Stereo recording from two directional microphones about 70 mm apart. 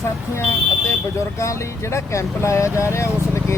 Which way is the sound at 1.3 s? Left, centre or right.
Left.